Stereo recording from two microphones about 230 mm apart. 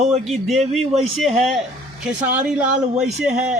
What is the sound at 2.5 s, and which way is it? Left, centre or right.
Speech, centre.